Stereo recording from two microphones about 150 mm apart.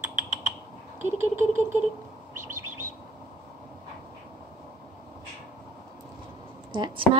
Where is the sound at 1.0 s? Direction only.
15° right (ahead or behind).